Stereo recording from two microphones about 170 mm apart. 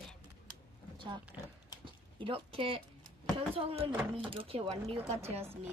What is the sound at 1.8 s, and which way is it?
Speech, 30° right (ahead or behind).